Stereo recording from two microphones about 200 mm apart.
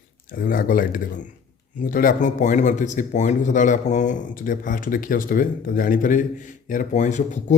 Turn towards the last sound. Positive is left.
turn(degrees=35)  # may be behind; listen again after turning